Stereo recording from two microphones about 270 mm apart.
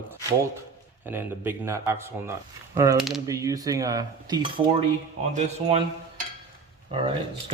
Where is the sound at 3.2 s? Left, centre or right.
Centre.